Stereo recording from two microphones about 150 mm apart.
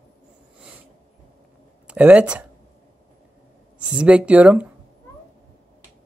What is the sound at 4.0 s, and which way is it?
Speech, 10° right (ahead or behind).